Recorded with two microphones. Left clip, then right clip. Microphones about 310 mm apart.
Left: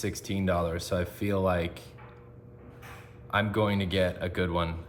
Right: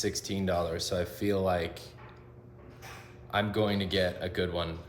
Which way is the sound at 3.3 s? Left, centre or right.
Left.